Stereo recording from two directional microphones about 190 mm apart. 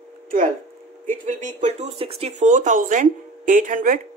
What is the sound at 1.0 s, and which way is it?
Speech, 40° right (ahead or behind).